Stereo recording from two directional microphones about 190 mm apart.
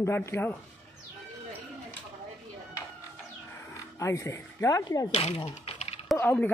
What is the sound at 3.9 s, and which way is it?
Speech, 15° left (ahead or behind).